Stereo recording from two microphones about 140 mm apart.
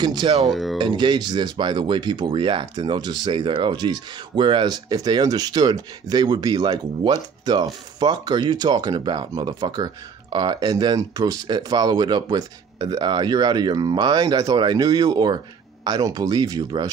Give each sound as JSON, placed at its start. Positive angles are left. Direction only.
{"t": 0.0, "sound": "speech", "side_deg": -30}
{"t": 0.5, "sound": "speech", "side_deg": 0}
{"t": 0.7, "sound": "speech", "side_deg": -35}